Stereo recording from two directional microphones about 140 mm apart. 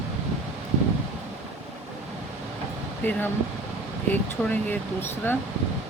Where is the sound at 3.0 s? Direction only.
15° left (ahead or behind).